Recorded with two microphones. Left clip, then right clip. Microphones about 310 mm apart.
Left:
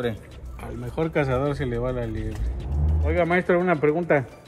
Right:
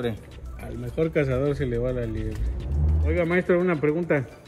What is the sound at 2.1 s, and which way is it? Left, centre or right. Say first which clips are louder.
Speech: even; centre.